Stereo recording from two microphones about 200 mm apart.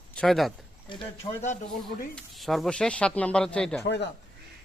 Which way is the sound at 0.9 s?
25° left (ahead or behind).